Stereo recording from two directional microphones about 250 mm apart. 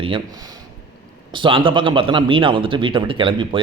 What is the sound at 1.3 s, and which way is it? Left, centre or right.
A man's voice, centre.